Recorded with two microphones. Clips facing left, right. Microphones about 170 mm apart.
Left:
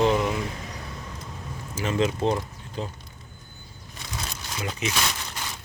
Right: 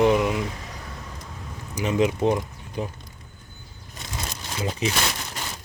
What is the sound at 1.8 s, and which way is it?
Speech, 15° right (ahead or behind).